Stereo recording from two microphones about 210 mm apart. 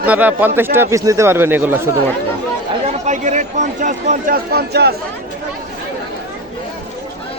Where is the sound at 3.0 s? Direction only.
35° right (ahead or behind).